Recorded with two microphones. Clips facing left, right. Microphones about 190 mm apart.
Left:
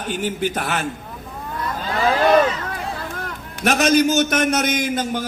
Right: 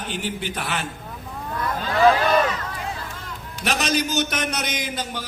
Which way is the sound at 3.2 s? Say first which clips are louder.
Left 7 dB; 60° left (ahead or behind).